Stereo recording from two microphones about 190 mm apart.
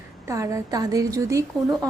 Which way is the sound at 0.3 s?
15° right (ahead or behind).